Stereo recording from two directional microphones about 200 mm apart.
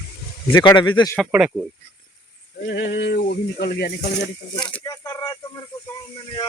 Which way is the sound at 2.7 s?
55° left (ahead or behind).